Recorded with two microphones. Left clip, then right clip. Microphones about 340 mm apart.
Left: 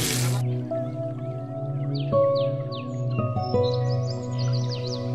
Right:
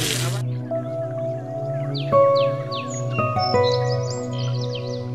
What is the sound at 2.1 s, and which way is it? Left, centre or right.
Music, right.